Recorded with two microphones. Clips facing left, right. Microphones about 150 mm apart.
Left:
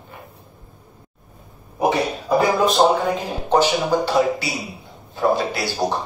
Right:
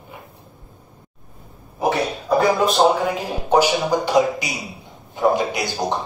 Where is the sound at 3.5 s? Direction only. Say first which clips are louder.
Even; 10° right (ahead or behind).